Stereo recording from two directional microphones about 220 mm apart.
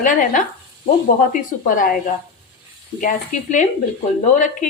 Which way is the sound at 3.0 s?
35° left (ahead or behind).